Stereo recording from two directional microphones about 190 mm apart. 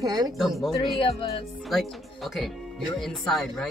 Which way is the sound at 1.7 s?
Centre (ahead or behind).